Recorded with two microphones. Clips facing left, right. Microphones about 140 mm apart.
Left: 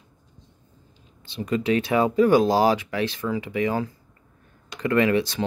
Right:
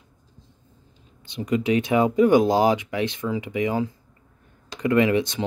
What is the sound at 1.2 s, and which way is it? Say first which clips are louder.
Speech: right 1 dB; 20° right (ahead or behind).